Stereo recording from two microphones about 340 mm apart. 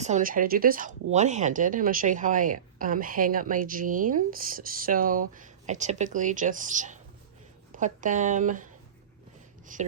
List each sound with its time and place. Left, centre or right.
0.0 s speech: right